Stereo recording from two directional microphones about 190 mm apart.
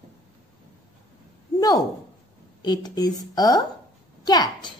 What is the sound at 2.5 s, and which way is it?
A woman's voice, 20° left (ahead or behind).